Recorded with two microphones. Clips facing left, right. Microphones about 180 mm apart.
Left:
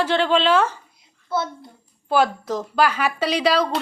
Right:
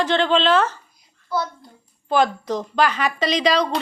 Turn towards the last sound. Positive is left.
turn(degrees=5)  # may be behind; listen again after turning